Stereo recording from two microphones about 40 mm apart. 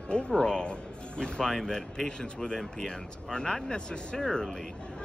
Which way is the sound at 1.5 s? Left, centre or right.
Centre.